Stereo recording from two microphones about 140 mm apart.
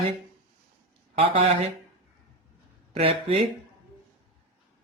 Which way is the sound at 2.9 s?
40° right (ahead or behind).